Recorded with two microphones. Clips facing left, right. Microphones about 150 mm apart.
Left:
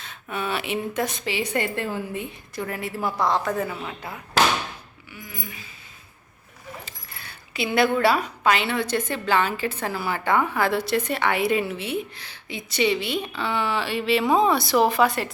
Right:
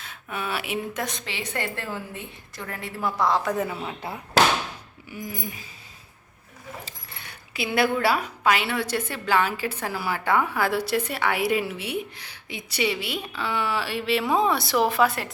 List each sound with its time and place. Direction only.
0.0 s a woman's voice: 10° right (ahead or behind)
5.1 s a sound: 40° right (ahead or behind)
7.5 s a woman's voice: 5° right (ahead or behind)